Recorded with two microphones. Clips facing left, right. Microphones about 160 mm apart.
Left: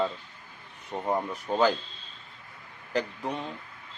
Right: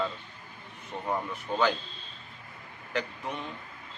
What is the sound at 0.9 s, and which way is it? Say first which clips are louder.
Speech: left 3 dB; 35° left (ahead or behind).